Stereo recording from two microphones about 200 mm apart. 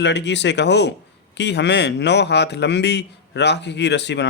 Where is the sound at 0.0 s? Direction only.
60° left (ahead or behind).